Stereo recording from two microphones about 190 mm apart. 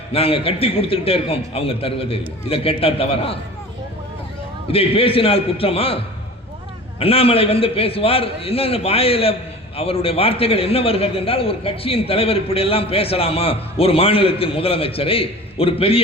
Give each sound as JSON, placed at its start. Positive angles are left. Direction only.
{"t": 0.1, "sound": "a man's voice", "side_deg": 30}
{"t": 4.7, "sound": "a man's voice", "side_deg": 30}
{"t": 7.0, "sound": "a man's voice", "side_deg": 30}